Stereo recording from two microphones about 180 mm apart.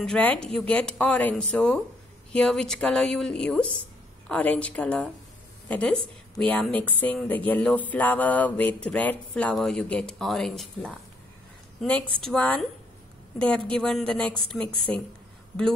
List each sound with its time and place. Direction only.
0.0 s speech: 5° left (ahead or behind)
12.2 s speech: 5° left (ahead or behind)